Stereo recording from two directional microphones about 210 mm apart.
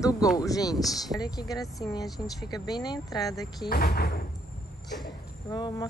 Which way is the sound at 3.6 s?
50° left (ahead or behind).